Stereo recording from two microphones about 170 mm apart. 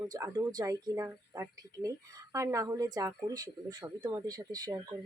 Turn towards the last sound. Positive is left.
turn(degrees=-20)  # may be behind; listen again after turning